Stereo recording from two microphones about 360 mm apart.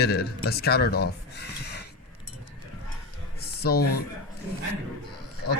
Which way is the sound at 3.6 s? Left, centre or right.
Left.